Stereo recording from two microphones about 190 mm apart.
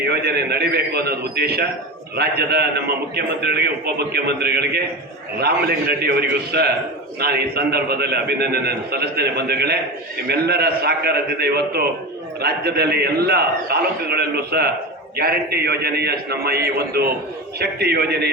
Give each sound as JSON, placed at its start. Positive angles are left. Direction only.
{"t": 0.0, "sound": "a man's voice", "side_deg": -60}